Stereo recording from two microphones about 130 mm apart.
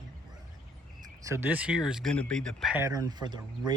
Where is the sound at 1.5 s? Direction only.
10° right (ahead or behind).